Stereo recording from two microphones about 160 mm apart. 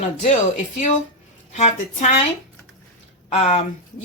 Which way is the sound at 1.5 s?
50° left (ahead or behind).